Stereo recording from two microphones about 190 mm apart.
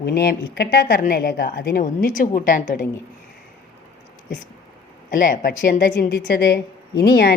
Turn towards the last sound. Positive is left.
turn(degrees=60)  # may be behind; listen again after turning